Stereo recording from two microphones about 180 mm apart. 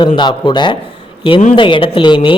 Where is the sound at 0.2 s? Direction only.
25° left (ahead or behind).